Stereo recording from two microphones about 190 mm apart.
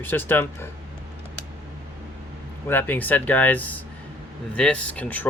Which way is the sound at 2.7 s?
10° left (ahead or behind).